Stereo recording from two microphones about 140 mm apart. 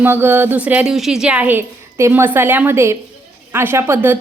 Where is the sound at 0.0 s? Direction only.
15° right (ahead or behind).